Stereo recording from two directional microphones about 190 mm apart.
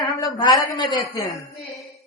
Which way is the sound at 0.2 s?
25° left (ahead or behind).